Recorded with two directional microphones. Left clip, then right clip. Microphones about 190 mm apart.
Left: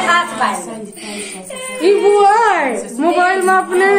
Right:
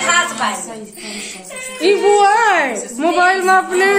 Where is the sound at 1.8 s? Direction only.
20° right (ahead or behind).